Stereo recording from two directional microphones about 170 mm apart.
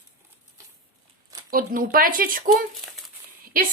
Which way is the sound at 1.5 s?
55° right (ahead or behind).